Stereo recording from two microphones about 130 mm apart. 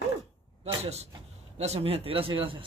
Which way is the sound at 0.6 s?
55° right (ahead or behind).